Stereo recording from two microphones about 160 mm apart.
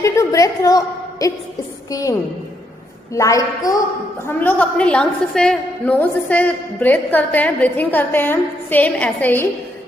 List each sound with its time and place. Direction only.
0.0 s a woman's voice: 20° left (ahead or behind)
4.3 s a woman's voice: 10° left (ahead or behind)